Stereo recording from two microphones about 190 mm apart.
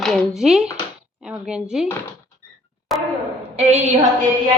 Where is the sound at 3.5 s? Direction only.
35° right (ahead or behind).